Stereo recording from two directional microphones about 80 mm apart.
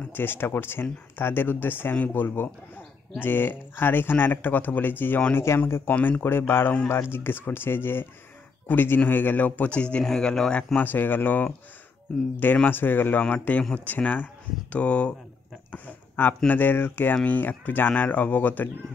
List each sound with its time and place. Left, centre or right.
0.1 s speech: left; by 10.8 s centre
10.8 s speech: left
12.6 s speech: left
15.7 s a sound: left
16.4 s speech: left